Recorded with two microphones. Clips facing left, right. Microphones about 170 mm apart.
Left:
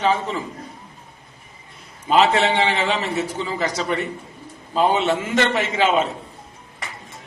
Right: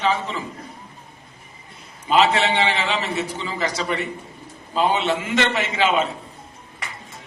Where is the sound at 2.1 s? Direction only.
45° left (ahead or behind).